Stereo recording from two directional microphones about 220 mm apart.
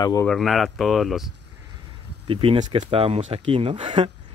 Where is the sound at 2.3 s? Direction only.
25° right (ahead or behind).